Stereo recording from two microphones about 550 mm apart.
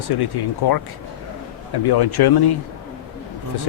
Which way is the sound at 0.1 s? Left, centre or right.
Left.